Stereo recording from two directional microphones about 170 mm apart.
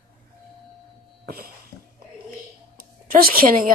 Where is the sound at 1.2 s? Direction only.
65° right (ahead or behind).